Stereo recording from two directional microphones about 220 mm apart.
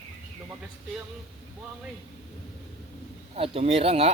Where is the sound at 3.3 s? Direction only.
30° right (ahead or behind).